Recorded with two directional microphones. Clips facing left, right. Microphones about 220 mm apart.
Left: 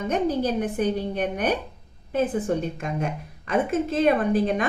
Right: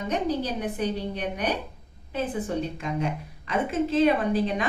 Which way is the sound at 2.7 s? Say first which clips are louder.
Even; 50° left (ahead or behind).